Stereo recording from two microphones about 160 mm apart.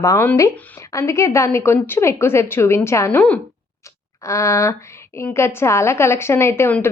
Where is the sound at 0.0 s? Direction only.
20° left (ahead or behind).